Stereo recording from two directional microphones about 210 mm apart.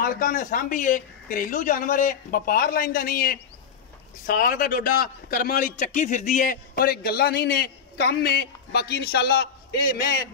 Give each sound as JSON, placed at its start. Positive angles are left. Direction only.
{"t": 0.0, "sound": "a man's voice", "side_deg": 40}